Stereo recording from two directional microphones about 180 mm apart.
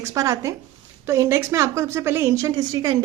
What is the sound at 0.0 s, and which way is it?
A woman's voice, 15° right (ahead or behind).